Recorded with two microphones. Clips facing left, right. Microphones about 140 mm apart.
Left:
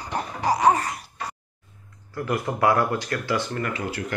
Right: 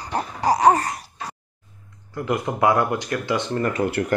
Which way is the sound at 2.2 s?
20° right (ahead or behind).